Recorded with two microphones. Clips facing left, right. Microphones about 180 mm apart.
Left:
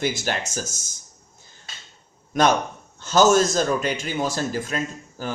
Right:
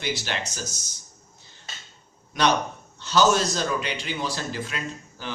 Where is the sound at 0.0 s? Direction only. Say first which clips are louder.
Left 4 dB; 45° left (ahead or behind).